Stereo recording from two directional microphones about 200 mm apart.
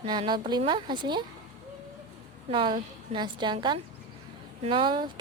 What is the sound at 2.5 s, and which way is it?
Speech, 25° right (ahead or behind).